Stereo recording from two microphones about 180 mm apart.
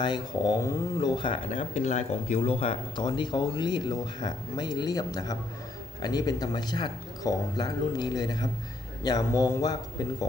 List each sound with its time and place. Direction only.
0.0 s speech: 25° left (ahead or behind)